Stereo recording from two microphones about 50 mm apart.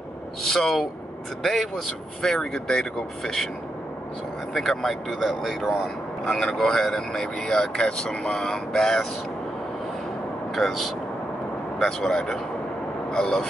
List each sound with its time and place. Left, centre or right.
0.4 s speech: centre
4.6 s speech: centre
10.5 s speech: centre
12.0 s speech: centre